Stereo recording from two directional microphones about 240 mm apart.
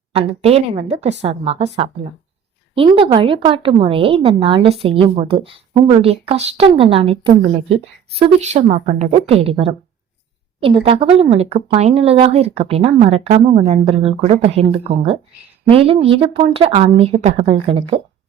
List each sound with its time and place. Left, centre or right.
0.1 s speech: right